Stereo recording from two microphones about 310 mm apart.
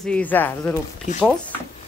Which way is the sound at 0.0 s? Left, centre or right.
Centre.